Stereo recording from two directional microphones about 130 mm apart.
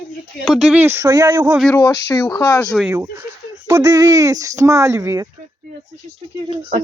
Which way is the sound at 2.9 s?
20° right (ahead or behind).